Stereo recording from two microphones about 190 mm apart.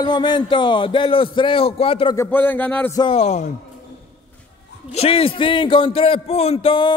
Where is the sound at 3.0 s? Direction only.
30° left (ahead or behind).